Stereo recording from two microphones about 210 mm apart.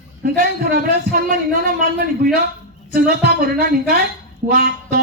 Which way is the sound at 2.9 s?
45° right (ahead or behind).